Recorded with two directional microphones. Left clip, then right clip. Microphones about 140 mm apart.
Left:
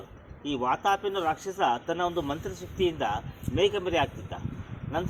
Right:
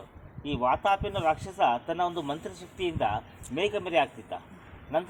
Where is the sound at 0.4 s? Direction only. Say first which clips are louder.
Right 1 dB; 25° right (ahead or behind).